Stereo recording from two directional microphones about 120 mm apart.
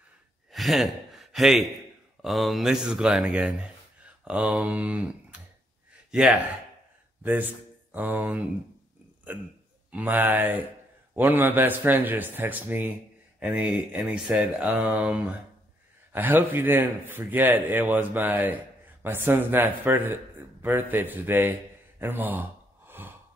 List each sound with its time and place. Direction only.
0.5 s a sound: centre (ahead or behind)
2.2 s speech: centre (ahead or behind)
7.2 s speech: 15° right (ahead or behind)
9.8 s a man's voice: 15° right (ahead or behind)
22.0 s gasp: 15° right (ahead or behind)